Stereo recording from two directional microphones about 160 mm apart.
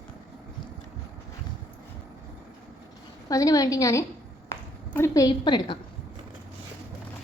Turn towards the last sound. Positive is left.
turn(degrees=30)  # may be behind; listen again after turning